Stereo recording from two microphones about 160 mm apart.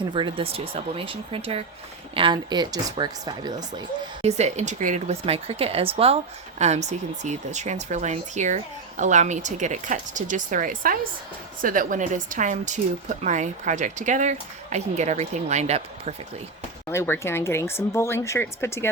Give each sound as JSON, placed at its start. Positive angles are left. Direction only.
{"t": 0.1, "sound": "speech", "side_deg": -30}
{"t": 4.2, "sound": "speech", "side_deg": -45}
{"t": 16.9, "sound": "speech", "side_deg": 15}